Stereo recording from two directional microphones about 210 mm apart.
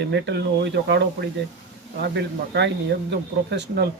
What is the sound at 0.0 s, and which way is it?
Speech, 55° right (ahead or behind).